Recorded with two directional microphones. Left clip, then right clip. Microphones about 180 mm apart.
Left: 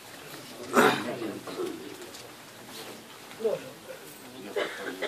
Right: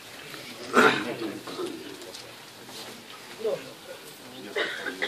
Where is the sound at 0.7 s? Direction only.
50° left (ahead or behind).